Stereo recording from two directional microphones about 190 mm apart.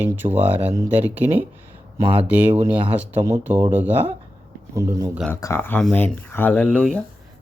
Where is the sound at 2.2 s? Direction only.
5° right (ahead or behind).